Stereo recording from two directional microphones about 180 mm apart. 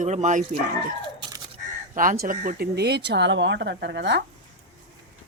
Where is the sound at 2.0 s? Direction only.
50° right (ahead or behind); by 4.2 s 80° right.